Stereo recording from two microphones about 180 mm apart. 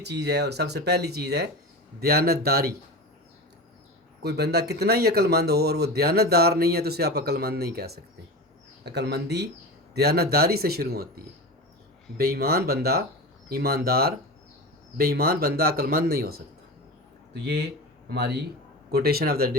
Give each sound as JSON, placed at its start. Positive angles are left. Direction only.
{"t": 0.0, "sound": "speech", "side_deg": -70}
{"t": 4.2, "sound": "speech", "side_deg": -65}
{"t": 17.4, "sound": "speech", "side_deg": -70}